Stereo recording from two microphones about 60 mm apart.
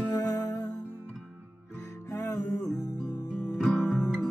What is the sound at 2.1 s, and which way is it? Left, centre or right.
Music, left.